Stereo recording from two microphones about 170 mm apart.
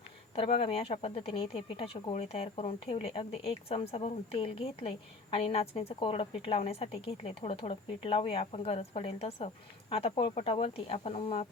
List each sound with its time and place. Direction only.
0.3 s speech: 35° left (ahead or behind)